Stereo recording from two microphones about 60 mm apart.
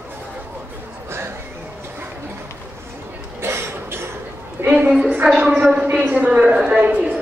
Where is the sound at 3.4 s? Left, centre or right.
Right.